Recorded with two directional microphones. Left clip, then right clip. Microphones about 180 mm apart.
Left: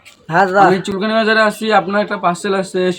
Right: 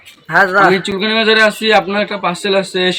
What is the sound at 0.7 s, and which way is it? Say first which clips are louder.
Speech: right 1 dB; 10° left (ahead or behind).